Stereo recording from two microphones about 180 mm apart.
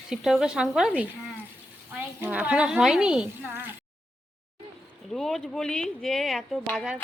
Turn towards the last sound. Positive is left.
turn(degrees=5)  # may be behind; listen again after turning